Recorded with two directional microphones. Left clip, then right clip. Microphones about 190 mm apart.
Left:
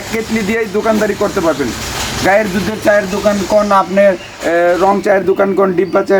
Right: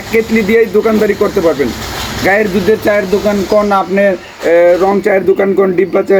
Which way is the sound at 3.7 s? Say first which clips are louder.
Left 1 dB; 20° left (ahead or behind).